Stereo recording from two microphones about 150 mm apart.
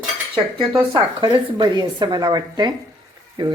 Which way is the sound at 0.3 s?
30° right (ahead or behind).